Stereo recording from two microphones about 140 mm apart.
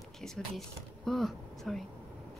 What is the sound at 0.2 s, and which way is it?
Speech, centre (ahead or behind).